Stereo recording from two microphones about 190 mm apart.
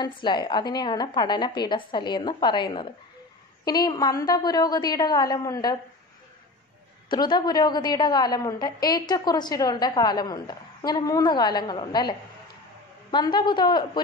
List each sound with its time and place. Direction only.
0.0 s a woman's voice: 25° left (ahead or behind)
7.1 s a woman's voice: 25° left (ahead or behind)